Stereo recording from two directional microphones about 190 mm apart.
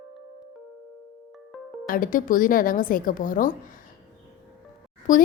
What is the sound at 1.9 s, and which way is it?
A woman's voice, 45° left (ahead or behind).